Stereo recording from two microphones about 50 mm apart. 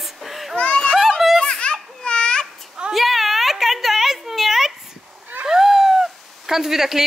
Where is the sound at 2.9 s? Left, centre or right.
Centre.